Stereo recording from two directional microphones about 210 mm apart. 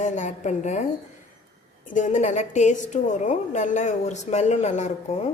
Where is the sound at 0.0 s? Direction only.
35° left (ahead or behind).